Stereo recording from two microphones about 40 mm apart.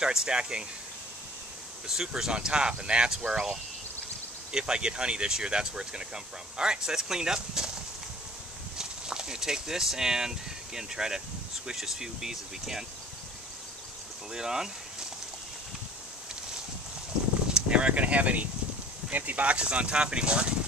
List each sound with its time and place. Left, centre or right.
0.0 s speech: centre
1.9 s speech: centre
8.7 s speech: centre
14.3 s speech: centre
17.6 s speech: right
19.6 s speech: right